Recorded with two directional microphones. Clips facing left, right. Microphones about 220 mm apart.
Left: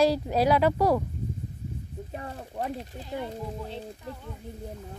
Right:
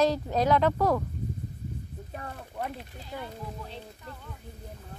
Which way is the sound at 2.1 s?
25° left (ahead or behind).